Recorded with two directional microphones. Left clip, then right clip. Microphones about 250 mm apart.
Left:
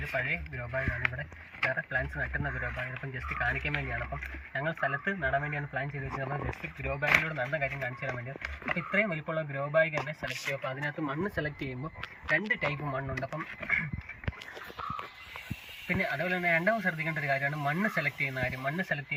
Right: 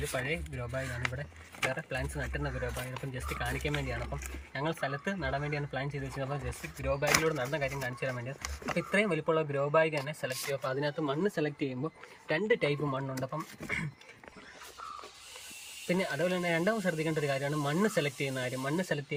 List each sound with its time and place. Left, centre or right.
0.1 s speech: centre
11.1 s speech: centre
15.9 s speech: centre